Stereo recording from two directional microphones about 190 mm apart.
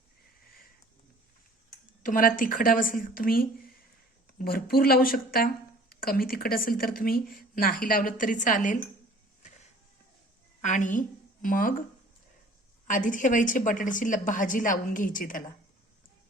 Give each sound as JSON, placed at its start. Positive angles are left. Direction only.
{"t": 2.0, "sound": "a woman's voice", "side_deg": 45}
{"t": 10.6, "sound": "a woman's voice", "side_deg": 40}
{"t": 12.9, "sound": "a woman's voice", "side_deg": 45}